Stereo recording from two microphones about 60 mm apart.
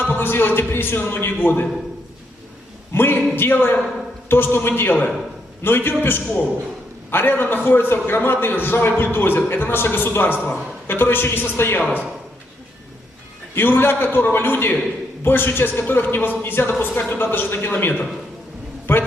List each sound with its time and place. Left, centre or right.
0.1 s a man's voice: left
2.9 s a man's voice: left
13.6 s a man's voice: left